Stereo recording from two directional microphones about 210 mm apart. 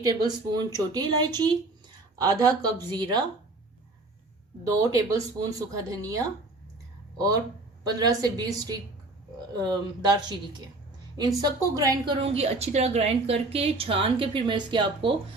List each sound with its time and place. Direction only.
0.0 s a woman's voice: 20° right (ahead or behind)
4.8 s speech: 15° right (ahead or behind)
7.9 s a woman's voice: 20° right (ahead or behind)